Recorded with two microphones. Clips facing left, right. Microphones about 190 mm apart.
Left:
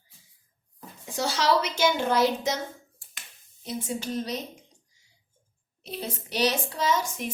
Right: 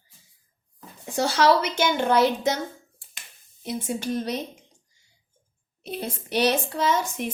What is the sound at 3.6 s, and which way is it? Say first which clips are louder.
Speech: right 3 dB; 60° right (ahead or behind).